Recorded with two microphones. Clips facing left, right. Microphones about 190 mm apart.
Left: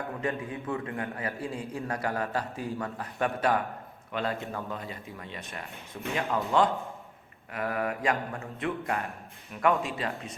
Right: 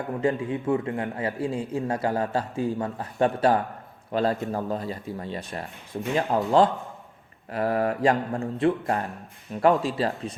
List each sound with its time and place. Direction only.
0.2 s a man's voice: 25° right (ahead or behind)
7.5 s speech: 35° right (ahead or behind)